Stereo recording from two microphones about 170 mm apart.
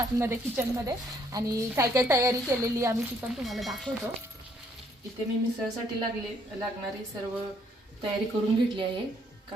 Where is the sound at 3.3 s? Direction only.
Centre (ahead or behind).